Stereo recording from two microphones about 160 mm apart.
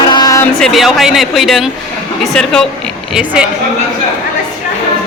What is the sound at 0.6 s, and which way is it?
A man's voice, centre (ahead or behind).